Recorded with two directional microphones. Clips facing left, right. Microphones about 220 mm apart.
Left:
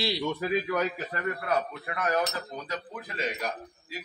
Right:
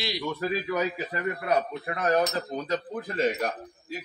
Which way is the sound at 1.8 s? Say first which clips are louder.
Right 5 dB; 30° right (ahead or behind).